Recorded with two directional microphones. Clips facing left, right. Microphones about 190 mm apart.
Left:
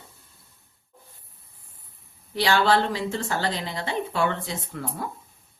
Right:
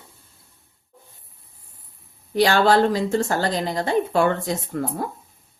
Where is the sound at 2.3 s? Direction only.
45° right (ahead or behind).